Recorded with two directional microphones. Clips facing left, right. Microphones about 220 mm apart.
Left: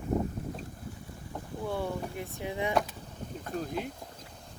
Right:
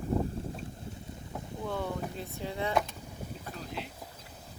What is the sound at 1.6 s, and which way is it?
Speech, 10° left (ahead or behind).